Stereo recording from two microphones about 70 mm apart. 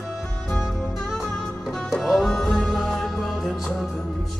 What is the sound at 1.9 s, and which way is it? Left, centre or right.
Music, centre.